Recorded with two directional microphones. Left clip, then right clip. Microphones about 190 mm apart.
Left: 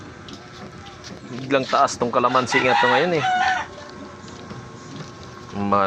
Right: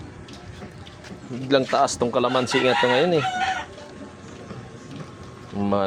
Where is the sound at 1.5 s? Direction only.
20° right (ahead or behind).